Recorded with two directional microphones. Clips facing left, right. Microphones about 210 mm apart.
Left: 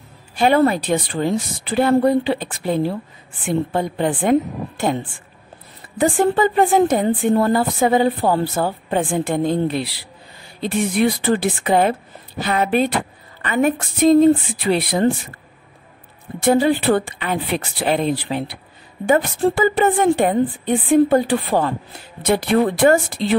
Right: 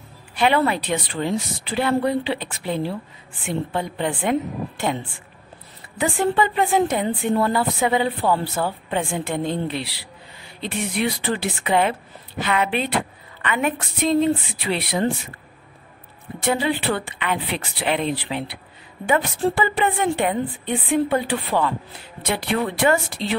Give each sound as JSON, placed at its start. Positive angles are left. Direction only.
{"t": 0.4, "sound": "speech", "side_deg": 40}
{"t": 5.9, "sound": "speech", "side_deg": 45}
{"t": 16.4, "sound": "speech", "side_deg": 45}